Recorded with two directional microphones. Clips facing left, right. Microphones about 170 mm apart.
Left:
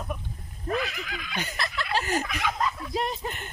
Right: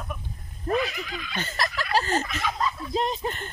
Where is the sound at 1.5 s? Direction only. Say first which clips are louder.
Right 5 dB; 40° right (ahead or behind).